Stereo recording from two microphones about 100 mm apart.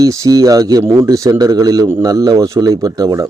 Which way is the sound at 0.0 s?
35° right (ahead or behind).